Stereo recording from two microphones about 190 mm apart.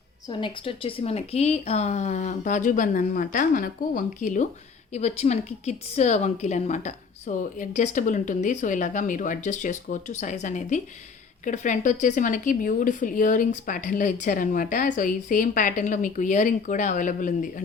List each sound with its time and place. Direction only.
0.3 s a woman's voice: 25° left (ahead or behind); by 17.5 s 45° left (ahead or behind)